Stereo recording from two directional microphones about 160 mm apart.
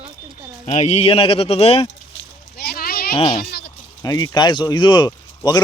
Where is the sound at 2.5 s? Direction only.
80° left.